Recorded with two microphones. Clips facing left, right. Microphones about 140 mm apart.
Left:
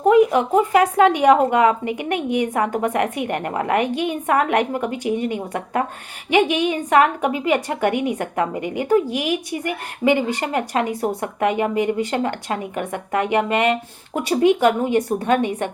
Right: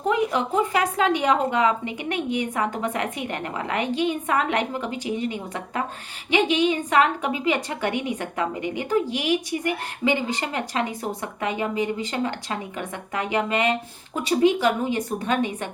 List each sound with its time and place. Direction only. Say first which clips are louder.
0.0 s a woman's voice: left 8 dB; 50° left (ahead or behind)